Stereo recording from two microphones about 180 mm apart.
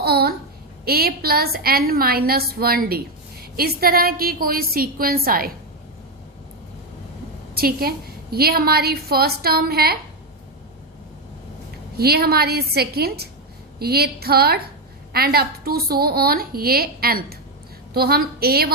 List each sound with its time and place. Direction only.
0.0 s a child's voice: 60° right (ahead or behind)
7.5 s a woman's voice: 55° right (ahead or behind)
11.9 s a woman's voice: 60° right (ahead or behind)